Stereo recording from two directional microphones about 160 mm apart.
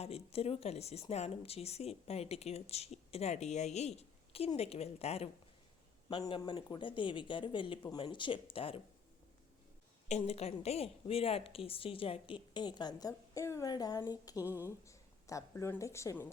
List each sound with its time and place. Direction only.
0.0 s speech: 40° left (ahead or behind)
10.1 s speech: 40° left (ahead or behind); by 14.4 s 25° left (ahead or behind)
14.4 s speech: 10° right (ahead or behind)
14.8 s speech: 20° left (ahead or behind)